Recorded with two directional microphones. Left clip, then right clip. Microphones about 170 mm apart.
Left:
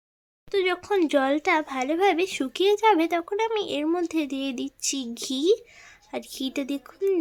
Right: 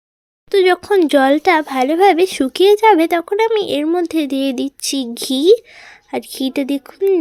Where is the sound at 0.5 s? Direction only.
30° right (ahead or behind).